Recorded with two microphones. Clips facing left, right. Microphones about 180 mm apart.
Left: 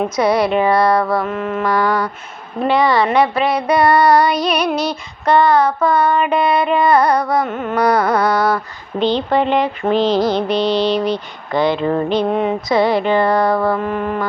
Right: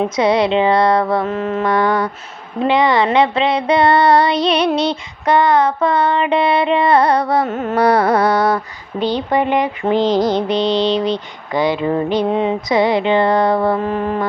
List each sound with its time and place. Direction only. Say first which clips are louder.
0.0 s speech: right 1 dB; 20° right (ahead or behind)
1.3 s mantra: right 1 dB; 35° right (ahead or behind)
1.6 s speech: right 1 dB; 20° right (ahead or behind)
7.4 s mantra: right 1 dB; 40° right (ahead or behind)
7.8 s speech: right 2 dB; 25° right (ahead or behind)
9.0 s speech: left 1 dB; 10° right (ahead or behind)
13.7 s mantra: right 1 dB; 35° right (ahead or behind)